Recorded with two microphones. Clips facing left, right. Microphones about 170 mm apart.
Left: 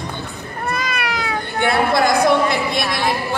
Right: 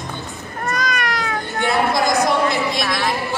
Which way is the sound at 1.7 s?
60° left (ahead or behind).